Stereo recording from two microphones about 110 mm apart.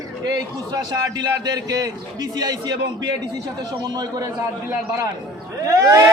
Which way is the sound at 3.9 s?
35° right (ahead or behind).